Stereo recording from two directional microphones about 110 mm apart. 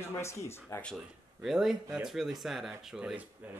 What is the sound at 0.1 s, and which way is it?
Speech, 25° left (ahead or behind).